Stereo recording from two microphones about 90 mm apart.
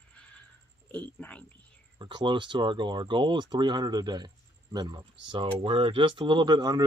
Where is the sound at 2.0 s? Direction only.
60° right (ahead or behind).